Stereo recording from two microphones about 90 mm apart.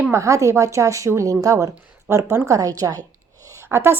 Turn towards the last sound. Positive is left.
turn(degrees=-25)  # may be behind; listen again after turning